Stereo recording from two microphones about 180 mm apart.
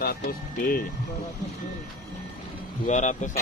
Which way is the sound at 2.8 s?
45° left (ahead or behind).